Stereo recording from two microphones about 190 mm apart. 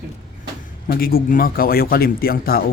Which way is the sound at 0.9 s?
50° left (ahead or behind).